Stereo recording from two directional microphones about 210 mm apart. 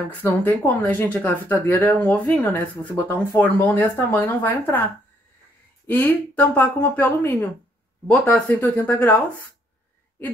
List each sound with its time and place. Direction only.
0.2 s speech: 10° left (ahead or behind)
5.9 s speech: 10° left (ahead or behind)